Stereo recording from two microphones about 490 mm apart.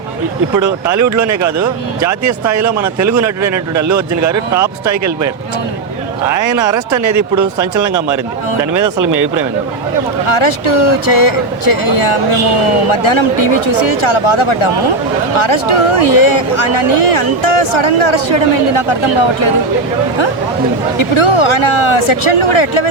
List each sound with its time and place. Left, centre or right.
0.9 s speech: right
6.4 s speech: right
10.2 s speech: left
21.0 s speech: left